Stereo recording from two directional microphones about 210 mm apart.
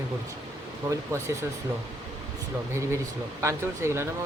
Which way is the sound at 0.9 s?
15° right (ahead or behind).